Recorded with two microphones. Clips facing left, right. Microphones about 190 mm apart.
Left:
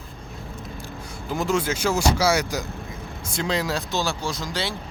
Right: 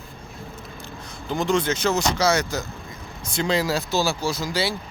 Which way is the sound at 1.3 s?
5° left (ahead or behind).